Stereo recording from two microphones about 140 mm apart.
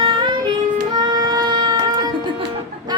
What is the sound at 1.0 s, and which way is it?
Child singing, 30° right (ahead or behind).